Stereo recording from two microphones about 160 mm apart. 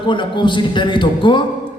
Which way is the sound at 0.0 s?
30° left (ahead or behind).